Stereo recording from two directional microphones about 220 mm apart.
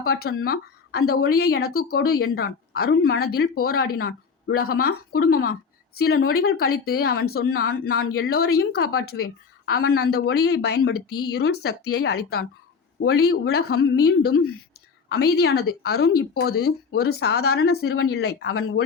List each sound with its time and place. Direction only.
0.0 s a woman's voice: 45° left (ahead or behind)